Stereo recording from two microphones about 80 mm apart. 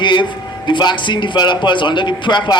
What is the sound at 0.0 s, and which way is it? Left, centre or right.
A man's voice, left.